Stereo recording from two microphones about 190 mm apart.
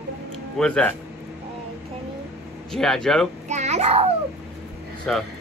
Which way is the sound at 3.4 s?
35° right (ahead or behind).